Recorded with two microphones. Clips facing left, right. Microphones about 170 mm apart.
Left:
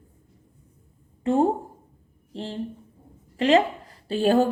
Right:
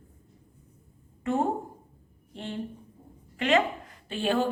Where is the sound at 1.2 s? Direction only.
30° left (ahead or behind).